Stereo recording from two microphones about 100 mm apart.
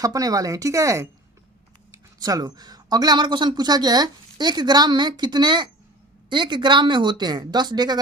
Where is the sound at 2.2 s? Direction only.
40° right (ahead or behind).